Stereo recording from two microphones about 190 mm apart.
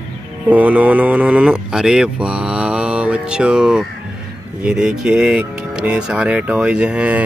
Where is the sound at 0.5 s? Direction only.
10° right (ahead or behind).